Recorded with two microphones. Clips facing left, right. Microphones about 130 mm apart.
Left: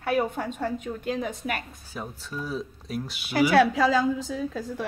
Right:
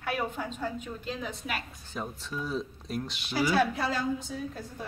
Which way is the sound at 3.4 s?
70° left (ahead or behind).